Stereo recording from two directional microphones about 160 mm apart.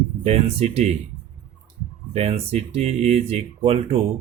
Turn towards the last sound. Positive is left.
turn(degrees=-40)  # may be behind; listen again after turning